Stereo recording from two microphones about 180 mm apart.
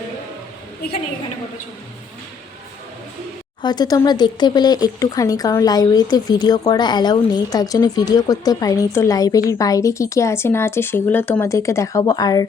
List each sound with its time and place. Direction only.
3.6 s speech: 25° left (ahead or behind)